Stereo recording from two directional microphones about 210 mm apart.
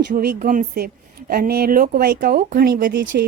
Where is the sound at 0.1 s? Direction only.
40° right (ahead or behind).